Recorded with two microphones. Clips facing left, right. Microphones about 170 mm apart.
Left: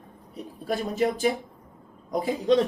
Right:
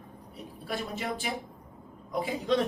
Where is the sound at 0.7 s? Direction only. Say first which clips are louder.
Left 8 dB; 40° left (ahead or behind).